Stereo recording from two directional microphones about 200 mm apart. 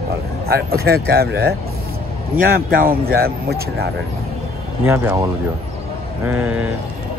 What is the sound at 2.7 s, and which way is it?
Speech, 50° right (ahead or behind).